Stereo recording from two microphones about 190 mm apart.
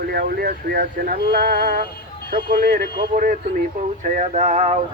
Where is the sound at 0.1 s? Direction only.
55° right (ahead or behind).